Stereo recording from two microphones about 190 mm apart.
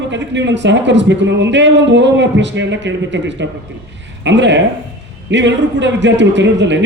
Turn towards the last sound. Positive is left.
turn(degrees=-70)  # may be behind; listen again after turning